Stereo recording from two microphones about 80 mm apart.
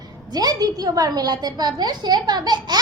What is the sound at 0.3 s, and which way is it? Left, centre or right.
A woman's voice, right.